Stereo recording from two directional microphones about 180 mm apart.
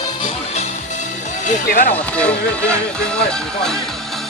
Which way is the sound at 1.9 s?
5° left (ahead or behind).